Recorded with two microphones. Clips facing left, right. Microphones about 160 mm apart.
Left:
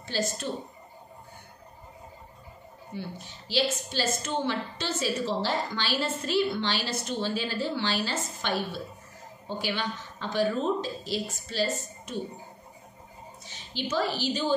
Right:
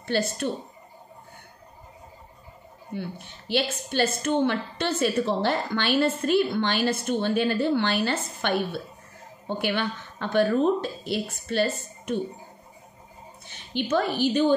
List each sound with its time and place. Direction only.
0.0 s speech: 60° right (ahead or behind)
2.9 s a woman's voice: 60° right (ahead or behind)
13.5 s a woman's voice: 55° right (ahead or behind)